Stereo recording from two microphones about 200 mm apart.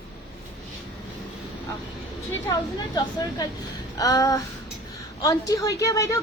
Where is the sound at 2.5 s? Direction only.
20° left (ahead or behind).